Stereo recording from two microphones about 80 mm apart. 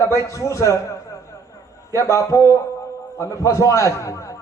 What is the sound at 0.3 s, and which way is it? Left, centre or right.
Speech, left.